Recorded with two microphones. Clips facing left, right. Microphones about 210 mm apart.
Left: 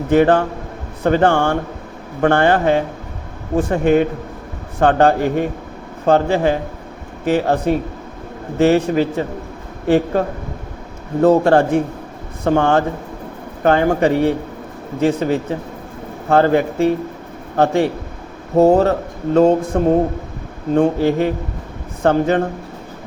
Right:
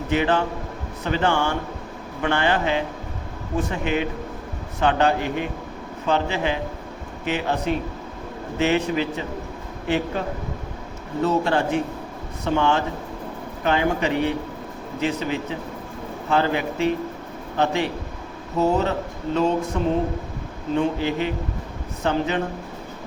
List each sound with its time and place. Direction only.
0.1 s a man's voice: 50° left (ahead or behind)
18.5 s speech: 50° left (ahead or behind)